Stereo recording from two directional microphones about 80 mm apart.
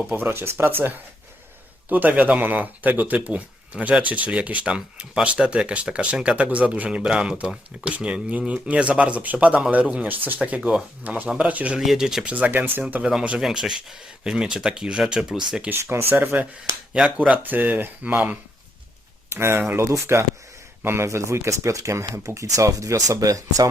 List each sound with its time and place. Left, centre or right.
0.1 s speech: right
11.8 s speech: centre; by 12.8 s right
13.0 s speech: centre
15.7 s speech: right
16.1 s speech: centre
19.3 s speech: right